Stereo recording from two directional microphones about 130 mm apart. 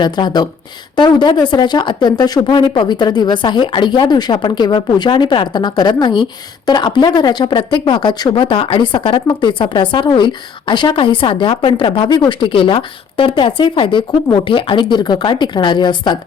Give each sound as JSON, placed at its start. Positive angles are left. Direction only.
{"t": 0.0, "sound": "speech", "side_deg": 35}